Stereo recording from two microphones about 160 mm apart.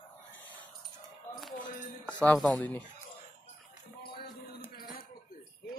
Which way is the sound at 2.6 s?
10° left (ahead or behind).